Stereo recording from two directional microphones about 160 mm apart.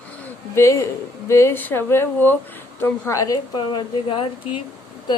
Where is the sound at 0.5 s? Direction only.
15° left (ahead or behind).